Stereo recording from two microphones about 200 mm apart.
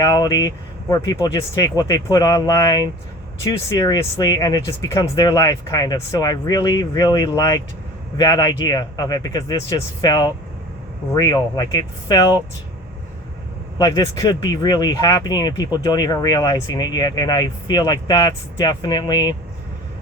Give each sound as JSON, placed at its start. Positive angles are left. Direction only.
{"t": 0.0, "sound": "speech", "side_deg": 20}
{"t": 13.7, "sound": "speech", "side_deg": 20}